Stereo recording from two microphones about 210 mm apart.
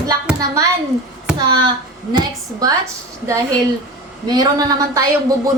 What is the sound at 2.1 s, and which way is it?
Speech, 20° right (ahead or behind).